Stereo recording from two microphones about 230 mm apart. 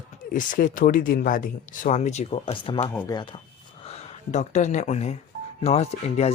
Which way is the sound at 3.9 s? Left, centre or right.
Left.